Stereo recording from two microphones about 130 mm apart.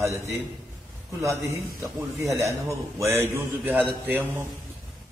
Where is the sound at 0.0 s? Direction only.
25° right (ahead or behind).